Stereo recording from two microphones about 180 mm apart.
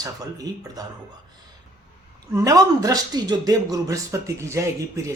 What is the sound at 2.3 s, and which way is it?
Speech, 20° right (ahead or behind).